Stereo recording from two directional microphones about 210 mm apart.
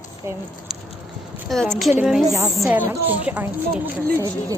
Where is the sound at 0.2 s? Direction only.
15° right (ahead or behind).